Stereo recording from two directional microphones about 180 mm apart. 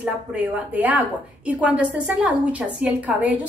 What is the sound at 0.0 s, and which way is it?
A woman's voice, 10° right (ahead or behind).